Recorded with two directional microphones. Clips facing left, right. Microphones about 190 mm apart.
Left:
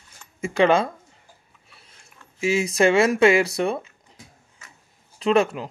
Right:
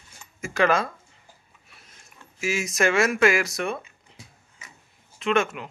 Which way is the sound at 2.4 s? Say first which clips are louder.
Left 5 dB; 30° left (ahead or behind).